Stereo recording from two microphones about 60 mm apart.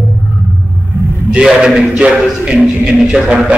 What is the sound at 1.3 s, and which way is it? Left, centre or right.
A man's voice, centre.